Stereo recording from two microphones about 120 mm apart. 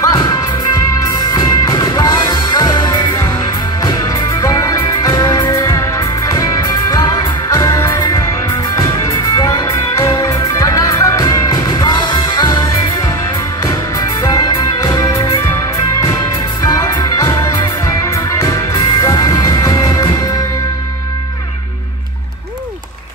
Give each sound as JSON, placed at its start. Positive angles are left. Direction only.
{"t": 0.1, "sound": "music", "side_deg": 30}
{"t": 9.3, "sound": "music", "side_deg": 35}
{"t": 13.7, "sound": "music", "side_deg": 30}
{"t": 16.6, "sound": "music", "side_deg": 30}